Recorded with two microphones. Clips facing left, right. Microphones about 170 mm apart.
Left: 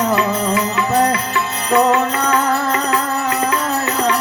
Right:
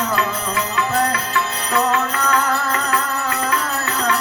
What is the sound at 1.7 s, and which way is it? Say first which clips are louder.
Music: left 5 dB; 25° left (ahead or behind).